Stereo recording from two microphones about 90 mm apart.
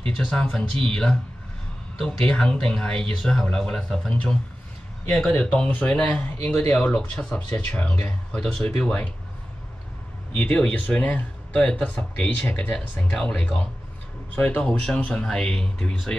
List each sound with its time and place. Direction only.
0.3 s speech: 10° left (ahead or behind)
10.3 s speech: 10° left (ahead or behind)